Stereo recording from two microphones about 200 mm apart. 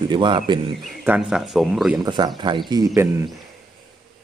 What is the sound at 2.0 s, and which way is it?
A man's voice, 20° right (ahead or behind).